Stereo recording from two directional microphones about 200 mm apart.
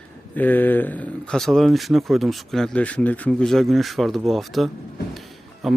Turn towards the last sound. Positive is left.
turn(degrees=0)  # may be behind; listen again after turning